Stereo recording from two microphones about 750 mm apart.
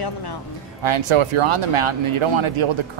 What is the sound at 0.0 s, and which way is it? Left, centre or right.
Speech, left.